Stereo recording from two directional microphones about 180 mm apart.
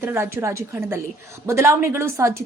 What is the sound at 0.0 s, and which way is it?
A woman's voice, 15° right (ahead or behind).